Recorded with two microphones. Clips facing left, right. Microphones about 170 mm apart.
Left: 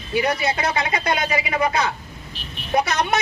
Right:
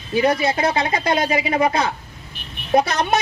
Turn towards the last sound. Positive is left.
turn(degrees=-25)  # may be behind; listen again after turning